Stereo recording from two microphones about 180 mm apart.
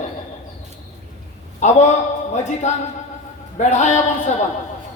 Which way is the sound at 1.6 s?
40° left (ahead or behind).